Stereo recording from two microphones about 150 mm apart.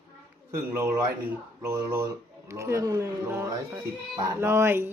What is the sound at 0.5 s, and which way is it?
A man's voice, 20° right (ahead or behind).